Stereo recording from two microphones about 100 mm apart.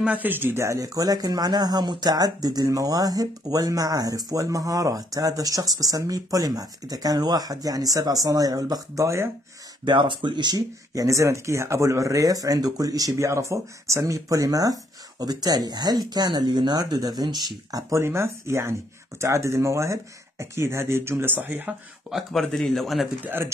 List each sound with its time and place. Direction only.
0.0 s speech: 15° right (ahead or behind); by 9.3 s 30° right (ahead or behind)
9.8 s speech: 55° right (ahead or behind); by 21.7 s 20° right (ahead or behind)
22.1 s a man's voice: 5° left (ahead or behind)
23.2 s speech: 20° right (ahead or behind)